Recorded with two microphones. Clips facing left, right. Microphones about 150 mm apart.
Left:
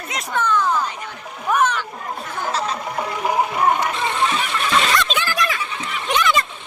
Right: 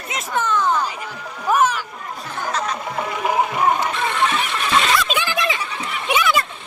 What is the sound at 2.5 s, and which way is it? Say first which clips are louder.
Music: even; 30° left (ahead or behind).